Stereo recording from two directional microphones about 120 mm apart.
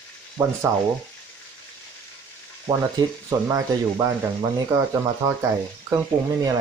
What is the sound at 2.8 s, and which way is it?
Speech, 25° right (ahead or behind).